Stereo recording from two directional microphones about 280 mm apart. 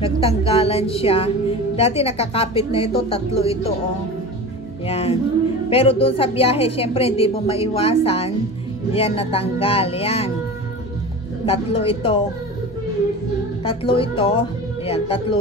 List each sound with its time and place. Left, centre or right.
0.0 s a woman's voice: left
4.8 s a woman's voice: left
11.4 s a woman's voice: centre
13.7 s a woman's voice: centre